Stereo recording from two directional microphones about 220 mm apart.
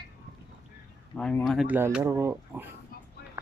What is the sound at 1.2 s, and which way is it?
Speech, 5° left (ahead or behind).